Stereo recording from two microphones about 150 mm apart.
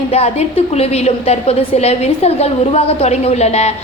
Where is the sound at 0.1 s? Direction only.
45° left (ahead or behind).